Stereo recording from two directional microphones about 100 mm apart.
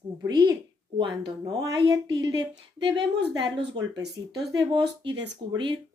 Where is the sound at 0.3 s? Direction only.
45° right (ahead or behind).